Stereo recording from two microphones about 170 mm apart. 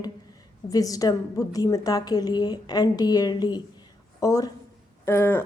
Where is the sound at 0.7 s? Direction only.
20° left (ahead or behind).